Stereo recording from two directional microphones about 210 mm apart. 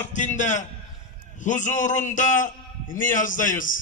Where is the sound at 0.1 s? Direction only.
35° left (ahead or behind).